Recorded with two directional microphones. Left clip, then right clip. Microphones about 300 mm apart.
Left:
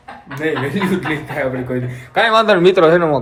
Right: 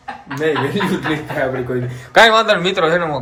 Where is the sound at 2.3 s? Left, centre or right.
Centre.